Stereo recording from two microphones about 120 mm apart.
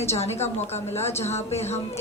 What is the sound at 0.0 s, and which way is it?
Speech, 60° left (ahead or behind).